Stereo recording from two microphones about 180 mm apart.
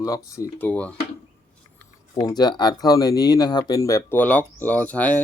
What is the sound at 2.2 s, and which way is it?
Speech, 20° left (ahead or behind).